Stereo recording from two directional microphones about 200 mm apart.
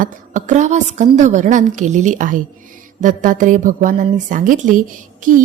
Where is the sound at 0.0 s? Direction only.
40° right (ahead or behind).